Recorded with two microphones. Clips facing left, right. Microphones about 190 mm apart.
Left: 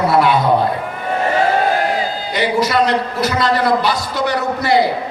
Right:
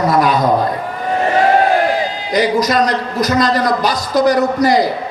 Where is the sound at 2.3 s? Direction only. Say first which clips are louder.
Right 3 dB; 40° right (ahead or behind).